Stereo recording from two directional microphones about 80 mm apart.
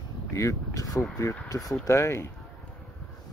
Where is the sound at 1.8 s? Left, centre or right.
Left.